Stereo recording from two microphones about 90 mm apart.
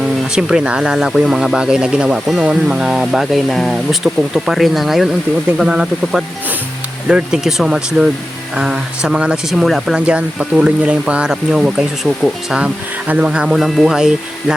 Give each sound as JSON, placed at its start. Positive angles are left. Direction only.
{"t": 0.3, "sound": "speech", "side_deg": -10}